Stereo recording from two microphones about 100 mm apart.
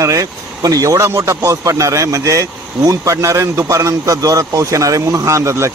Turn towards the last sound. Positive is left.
turn(degrees=-30)  # may be behind; listen again after turning